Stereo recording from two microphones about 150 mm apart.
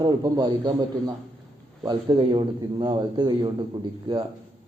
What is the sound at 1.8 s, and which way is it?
Speech, 30° right (ahead or behind).